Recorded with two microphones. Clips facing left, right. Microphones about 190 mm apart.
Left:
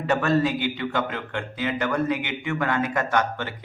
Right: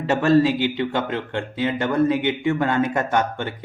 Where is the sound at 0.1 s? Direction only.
25° right (ahead or behind).